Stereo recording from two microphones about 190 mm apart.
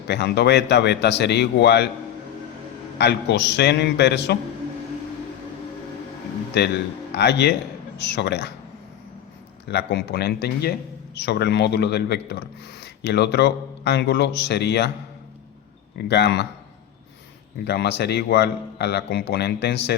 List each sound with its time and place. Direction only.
0.1 s a man's voice: 60° left (ahead or behind)
3.0 s a man's voice: 65° left (ahead or behind)
6.5 s a man's voice: 60° left (ahead or behind)
9.6 s a man's voice: 60° left (ahead or behind)
16.0 s a man's voice: 60° left (ahead or behind)
17.7 s a man's voice: 60° left (ahead or behind)